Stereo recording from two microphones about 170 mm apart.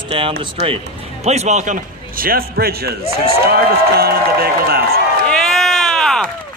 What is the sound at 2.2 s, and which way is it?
Speech, 60° right (ahead or behind).